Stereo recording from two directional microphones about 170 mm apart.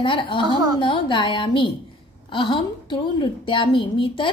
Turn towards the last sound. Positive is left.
turn(degrees=30)  # may be behind; listen again after turning